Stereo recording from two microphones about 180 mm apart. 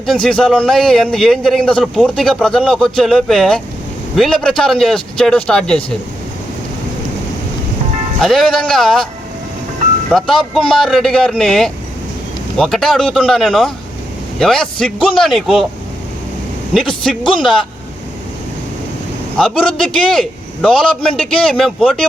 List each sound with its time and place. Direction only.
0.0 s a man's voice: centre (ahead or behind)
8.2 s a man's voice: centre (ahead or behind)
10.1 s a man's voice: centre (ahead or behind)
16.8 s a man's voice: 30° left (ahead or behind)
19.4 s a man's voice: centre (ahead or behind)